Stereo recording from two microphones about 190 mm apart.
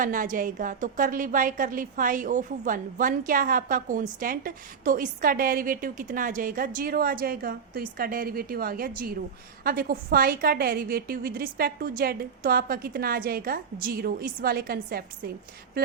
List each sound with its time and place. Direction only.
0.0 s a woman's voice: 45° right (ahead or behind)